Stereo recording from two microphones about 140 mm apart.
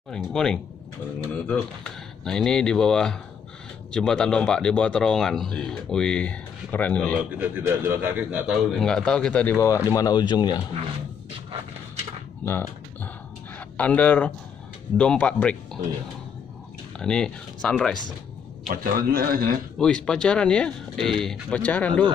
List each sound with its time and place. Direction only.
0.1 s a man's voice: 5° left (ahead or behind)
7.3 s a man's voice: 15° right (ahead or behind)
8.8 s speech: 5° left (ahead or behind); by 10.6 s 30° left (ahead or behind)
12.4 s typing: 15° left (ahead or behind)
13.6 s speech: 10° left (ahead or behind)
17.0 s a man's voice: 5° left (ahead or behind)
18.7 s a man's voice: 90° right
19.8 s speech: 5° left (ahead or behind)